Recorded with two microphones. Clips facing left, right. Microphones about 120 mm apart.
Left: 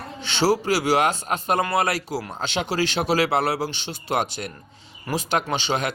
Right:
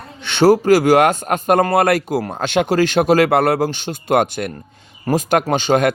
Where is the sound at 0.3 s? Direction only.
55° right (ahead or behind).